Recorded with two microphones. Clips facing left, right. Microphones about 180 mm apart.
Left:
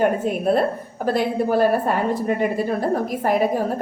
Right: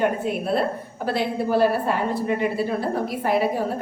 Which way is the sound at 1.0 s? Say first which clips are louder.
Left 3 dB; 45° left (ahead or behind).